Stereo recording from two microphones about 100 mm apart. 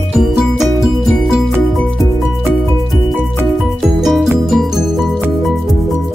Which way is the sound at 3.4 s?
Centre (ahead or behind).